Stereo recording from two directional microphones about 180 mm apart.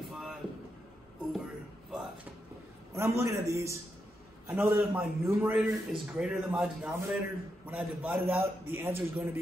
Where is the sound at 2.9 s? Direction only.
15° right (ahead or behind).